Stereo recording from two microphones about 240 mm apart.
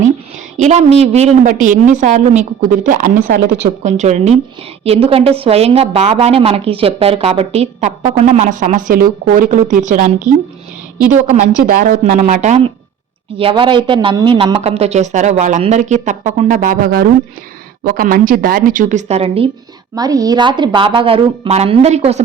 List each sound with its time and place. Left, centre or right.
0.5 s a woman's voice: right
11.7 s a woman's voice: right